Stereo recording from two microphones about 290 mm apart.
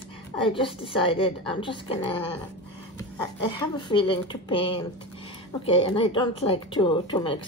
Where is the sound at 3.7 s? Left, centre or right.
Centre.